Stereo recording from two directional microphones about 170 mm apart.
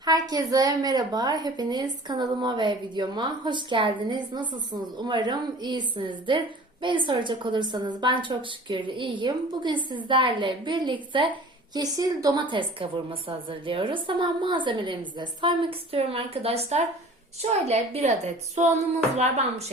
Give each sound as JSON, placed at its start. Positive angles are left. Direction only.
{"t": 0.0, "sound": "a woman's voice", "side_deg": -25}
{"t": 18.6, "sound": "a sound", "side_deg": -45}
{"t": 19.1, "sound": "a woman's voice", "side_deg": -40}